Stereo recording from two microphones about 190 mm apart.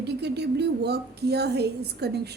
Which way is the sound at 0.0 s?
60° right (ahead or behind).